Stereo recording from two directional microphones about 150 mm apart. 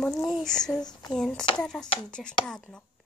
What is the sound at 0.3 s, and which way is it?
Speech, 5° left (ahead or behind).